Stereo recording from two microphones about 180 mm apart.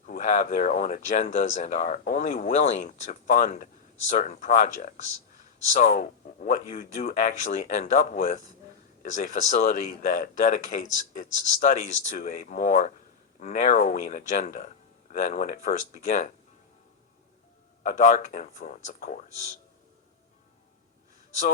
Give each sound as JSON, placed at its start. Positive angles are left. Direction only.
{"t": 0.1, "sound": "speech", "side_deg": 40}
{"t": 17.8, "sound": "speech", "side_deg": 45}